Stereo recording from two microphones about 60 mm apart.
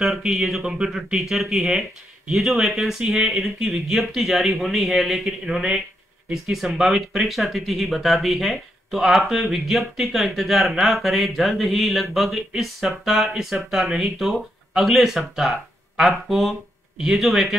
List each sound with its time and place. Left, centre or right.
0.0 s speech: centre